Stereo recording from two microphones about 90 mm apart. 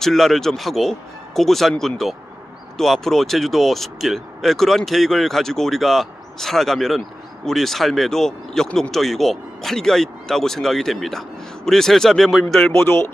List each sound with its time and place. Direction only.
0.0 s speech: 5° left (ahead or behind)
12.7 s speech: 25° left (ahead or behind)